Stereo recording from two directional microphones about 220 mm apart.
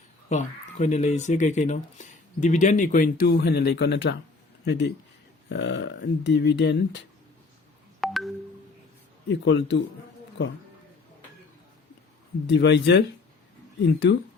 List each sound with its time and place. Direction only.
0.3 s speech: 30° left (ahead or behind); by 7.0 s 50° left (ahead or behind)
8.0 s a sound: centre (ahead or behind)
9.3 s speech: 55° left (ahead or behind)
12.5 s speech: 50° left (ahead or behind)